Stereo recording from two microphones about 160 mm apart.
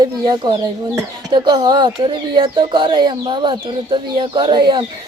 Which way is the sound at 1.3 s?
30° right (ahead or behind).